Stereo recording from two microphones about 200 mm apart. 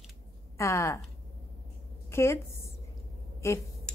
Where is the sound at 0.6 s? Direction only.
15° left (ahead or behind).